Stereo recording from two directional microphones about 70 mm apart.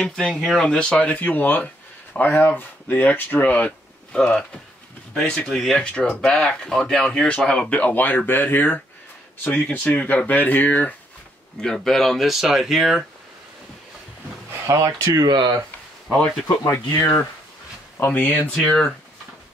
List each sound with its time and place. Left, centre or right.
0.0 s speech: centre
4.2 s speech: centre
7.9 s speech: left
11.6 s speech: centre
14.7 s speech: right
15.2 s speech: right
16.7 s speech: left
18.6 s speech: centre